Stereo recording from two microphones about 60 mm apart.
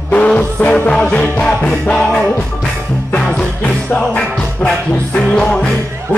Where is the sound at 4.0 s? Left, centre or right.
Centre.